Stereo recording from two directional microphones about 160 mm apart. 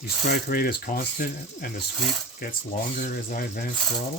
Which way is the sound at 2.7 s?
55° left (ahead or behind).